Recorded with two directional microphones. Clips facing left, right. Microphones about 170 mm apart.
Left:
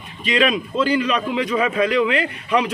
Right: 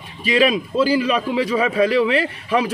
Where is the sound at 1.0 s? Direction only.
30° right (ahead or behind).